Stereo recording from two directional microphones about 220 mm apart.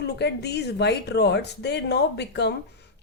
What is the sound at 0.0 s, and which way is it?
Speech, 50° left (ahead or behind).